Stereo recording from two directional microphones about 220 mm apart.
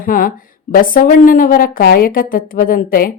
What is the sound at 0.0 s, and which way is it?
A woman's voice, 40° left (ahead or behind).